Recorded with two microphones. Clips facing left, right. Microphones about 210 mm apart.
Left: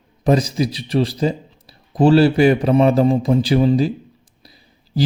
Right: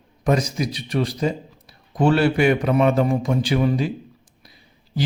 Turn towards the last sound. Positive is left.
turn(degrees=30)  # may be behind; listen again after turning